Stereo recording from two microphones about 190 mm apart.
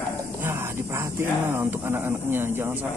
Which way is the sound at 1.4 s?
10° right (ahead or behind).